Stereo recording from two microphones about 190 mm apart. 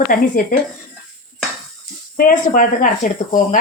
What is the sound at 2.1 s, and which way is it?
Speech, 45° left (ahead or behind).